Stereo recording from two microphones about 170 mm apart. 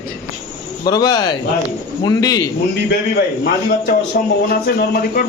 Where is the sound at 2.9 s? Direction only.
70° left (ahead or behind).